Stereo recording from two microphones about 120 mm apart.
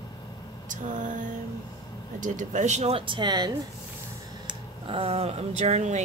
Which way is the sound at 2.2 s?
90° right.